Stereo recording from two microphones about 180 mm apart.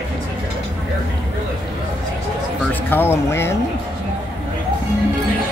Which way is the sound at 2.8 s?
10° left (ahead or behind).